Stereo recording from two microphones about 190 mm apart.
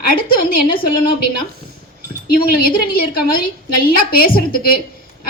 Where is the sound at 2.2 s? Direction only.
50° left (ahead or behind).